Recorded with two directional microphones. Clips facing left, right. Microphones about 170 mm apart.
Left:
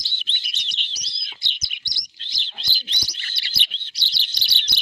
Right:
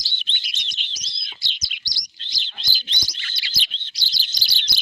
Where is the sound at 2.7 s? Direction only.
65° left (ahead or behind).